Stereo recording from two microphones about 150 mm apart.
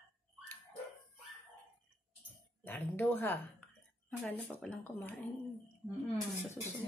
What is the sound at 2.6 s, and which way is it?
A man's voice, 15° left (ahead or behind).